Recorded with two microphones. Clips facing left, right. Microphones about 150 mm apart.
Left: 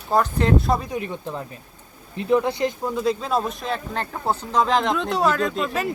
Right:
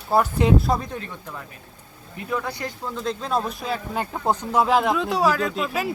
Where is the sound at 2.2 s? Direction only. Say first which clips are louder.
Left 8 dB; 25° left (ahead or behind).